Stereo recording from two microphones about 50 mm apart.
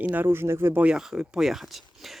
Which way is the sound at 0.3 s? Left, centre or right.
Right.